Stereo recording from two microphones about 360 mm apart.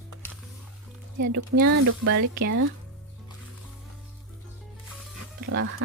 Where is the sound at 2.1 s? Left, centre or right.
Right.